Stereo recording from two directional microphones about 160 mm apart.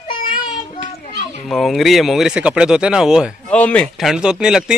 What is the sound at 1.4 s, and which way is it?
Speech, centre (ahead or behind).